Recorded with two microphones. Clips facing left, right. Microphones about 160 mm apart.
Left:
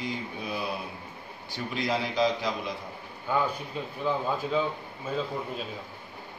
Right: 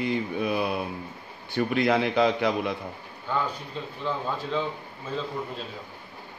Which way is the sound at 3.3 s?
10° left (ahead or behind).